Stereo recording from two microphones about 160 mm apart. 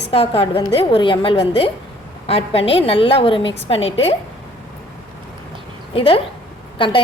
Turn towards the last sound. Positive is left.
turn(degrees=30)  # may be behind; listen again after turning